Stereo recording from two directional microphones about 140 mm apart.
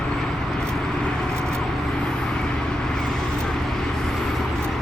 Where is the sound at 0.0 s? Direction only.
5° left (ahead or behind).